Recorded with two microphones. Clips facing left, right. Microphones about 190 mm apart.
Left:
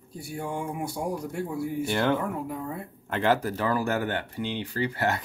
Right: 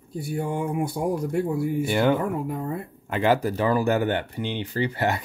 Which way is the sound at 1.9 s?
10° right (ahead or behind).